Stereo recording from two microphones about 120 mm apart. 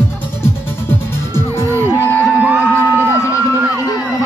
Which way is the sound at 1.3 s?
20° left (ahead or behind).